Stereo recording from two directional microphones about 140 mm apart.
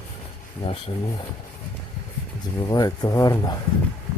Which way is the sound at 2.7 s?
30° left (ahead or behind).